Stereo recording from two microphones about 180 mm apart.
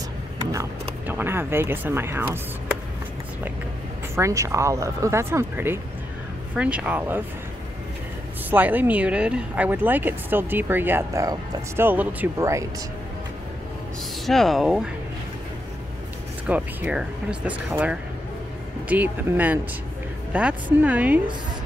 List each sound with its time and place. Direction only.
1.0 s speech: 10° right (ahead or behind)
4.1 s speech: 15° right (ahead or behind)
8.5 s speech: 10° right (ahead or behind)
14.2 s speech: centre (ahead or behind)
16.4 s speech: 5° right (ahead or behind)